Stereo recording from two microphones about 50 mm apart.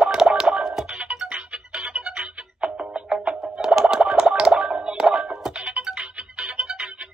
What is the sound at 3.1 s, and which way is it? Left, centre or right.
Music, centre.